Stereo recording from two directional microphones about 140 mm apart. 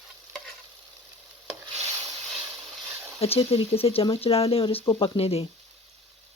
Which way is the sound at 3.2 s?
45° left (ahead or behind).